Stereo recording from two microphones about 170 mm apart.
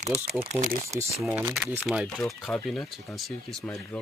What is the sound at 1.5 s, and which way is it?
Speech, 5° right (ahead or behind).